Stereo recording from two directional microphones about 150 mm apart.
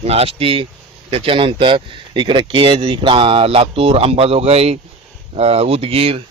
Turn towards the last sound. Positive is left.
turn(degrees=-40)  # may be behind; listen again after turning